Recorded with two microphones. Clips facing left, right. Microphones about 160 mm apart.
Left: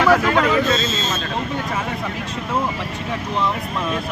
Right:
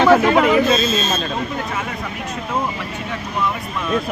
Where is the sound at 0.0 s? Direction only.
25° right (ahead or behind).